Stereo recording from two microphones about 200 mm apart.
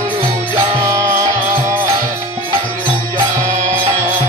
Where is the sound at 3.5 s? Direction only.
35° right (ahead or behind).